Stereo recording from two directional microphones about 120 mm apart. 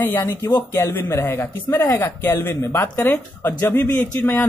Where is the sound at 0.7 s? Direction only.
25° left (ahead or behind).